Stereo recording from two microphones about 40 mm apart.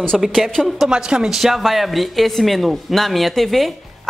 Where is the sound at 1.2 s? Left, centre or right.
Centre.